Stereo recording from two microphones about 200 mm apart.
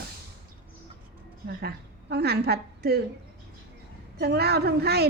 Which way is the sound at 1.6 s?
55° right (ahead or behind).